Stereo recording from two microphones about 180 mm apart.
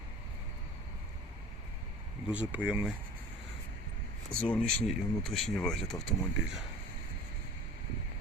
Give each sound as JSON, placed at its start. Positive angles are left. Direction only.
{"t": 2.3, "sound": "speech", "side_deg": -5}
{"t": 4.3, "sound": "speech", "side_deg": 5}